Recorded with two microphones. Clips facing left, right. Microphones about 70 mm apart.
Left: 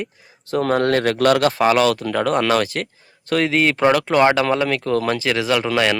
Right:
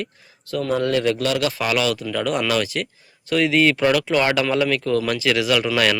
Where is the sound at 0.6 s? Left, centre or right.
Left.